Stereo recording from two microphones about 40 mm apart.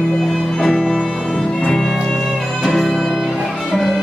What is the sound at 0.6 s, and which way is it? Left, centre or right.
Music, centre.